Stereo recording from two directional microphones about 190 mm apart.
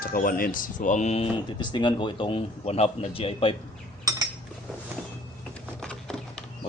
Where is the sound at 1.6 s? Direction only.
25° left (ahead or behind).